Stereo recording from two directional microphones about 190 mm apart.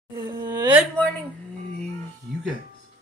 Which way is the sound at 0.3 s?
20° right (ahead or behind).